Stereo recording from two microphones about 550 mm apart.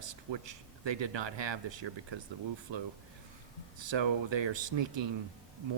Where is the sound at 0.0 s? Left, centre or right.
Right.